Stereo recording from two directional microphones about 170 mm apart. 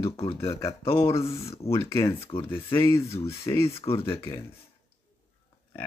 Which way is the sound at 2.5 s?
15° left (ahead or behind).